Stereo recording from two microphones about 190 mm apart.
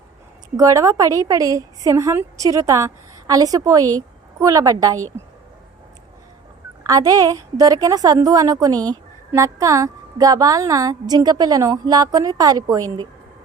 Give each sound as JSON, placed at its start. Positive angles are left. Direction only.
{"t": 0.5, "sound": "a woman's voice", "side_deg": -15}
{"t": 6.8, "sound": "a woman's voice", "side_deg": -20}